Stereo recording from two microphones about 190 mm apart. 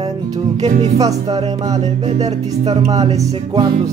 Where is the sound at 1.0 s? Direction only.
20° right (ahead or behind).